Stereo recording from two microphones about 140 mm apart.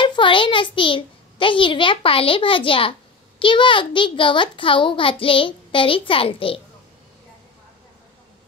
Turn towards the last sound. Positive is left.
turn(degrees=40)  # may be behind; listen again after turning